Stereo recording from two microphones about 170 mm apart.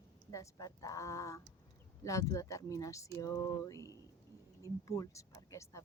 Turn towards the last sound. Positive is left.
turn(degrees=20)  # may be behind; listen again after turning